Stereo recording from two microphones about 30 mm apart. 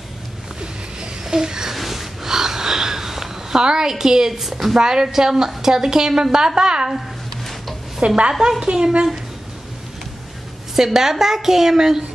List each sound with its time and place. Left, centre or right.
1.2 s a sound: right
1.7 s a sound: centre
4.0 s a woman's voice: centre
4.3 s a woman's voice: centre
4.7 s a woman's voice: right
8.3 s a woman's voice: centre
8.6 s a woman's voice: right
10.8 s a woman's voice: centre